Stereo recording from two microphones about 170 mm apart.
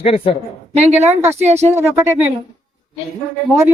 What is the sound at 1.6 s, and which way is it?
Speech, 15° right (ahead or behind).